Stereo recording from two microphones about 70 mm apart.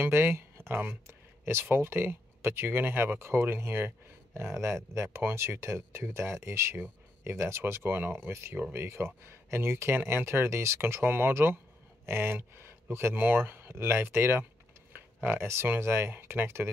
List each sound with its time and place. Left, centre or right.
0.0 s speech: right